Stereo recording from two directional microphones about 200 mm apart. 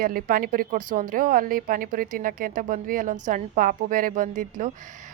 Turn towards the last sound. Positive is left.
turn(degrees=-40)  # may be behind; listen again after turning